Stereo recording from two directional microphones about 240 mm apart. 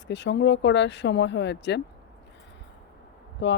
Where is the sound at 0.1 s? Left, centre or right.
Left.